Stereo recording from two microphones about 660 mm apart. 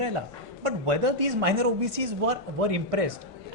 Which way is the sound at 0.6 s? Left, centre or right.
Right.